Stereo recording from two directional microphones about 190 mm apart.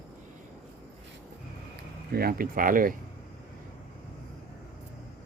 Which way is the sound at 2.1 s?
50° right (ahead or behind).